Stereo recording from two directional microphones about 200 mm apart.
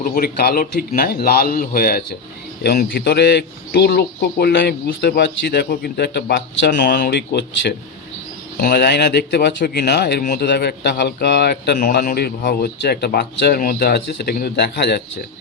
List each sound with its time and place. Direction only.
0.0 s a man's voice: 45° left (ahead or behind)
8.5 s speech: 50° left (ahead or behind)